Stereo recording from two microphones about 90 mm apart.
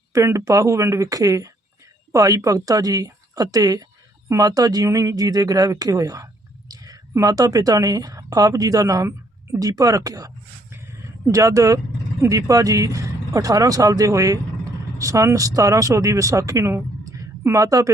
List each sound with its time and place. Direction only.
0.1 s speech: 35° right (ahead or behind)